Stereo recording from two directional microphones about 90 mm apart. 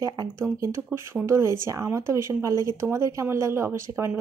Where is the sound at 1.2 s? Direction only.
30° right (ahead or behind).